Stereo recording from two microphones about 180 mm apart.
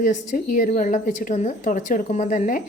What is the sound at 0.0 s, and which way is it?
A woman's voice, 45° left (ahead or behind).